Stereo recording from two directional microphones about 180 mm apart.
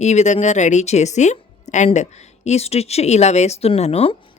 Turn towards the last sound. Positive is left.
turn(degrees=30)  # may be behind; listen again after turning